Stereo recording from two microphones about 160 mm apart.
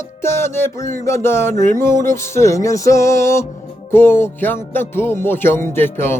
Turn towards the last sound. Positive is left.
turn(degrees=15)  # may be behind; listen again after turning